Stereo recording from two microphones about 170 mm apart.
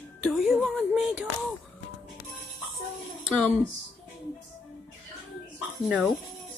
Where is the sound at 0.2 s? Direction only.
Centre (ahead or behind).